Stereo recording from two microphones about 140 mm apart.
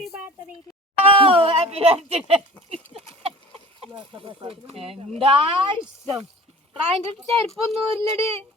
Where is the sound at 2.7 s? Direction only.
45° right (ahead or behind).